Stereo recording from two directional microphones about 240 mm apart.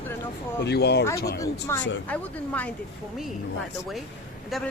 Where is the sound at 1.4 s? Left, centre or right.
Centre.